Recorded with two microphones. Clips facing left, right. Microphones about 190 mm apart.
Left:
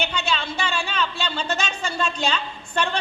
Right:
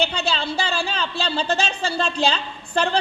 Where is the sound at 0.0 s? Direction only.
35° right (ahead or behind).